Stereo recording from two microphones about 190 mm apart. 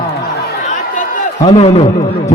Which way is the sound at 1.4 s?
30° left (ahead or behind).